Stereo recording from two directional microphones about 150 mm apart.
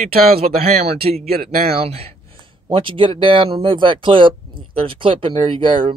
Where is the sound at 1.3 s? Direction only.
90° right.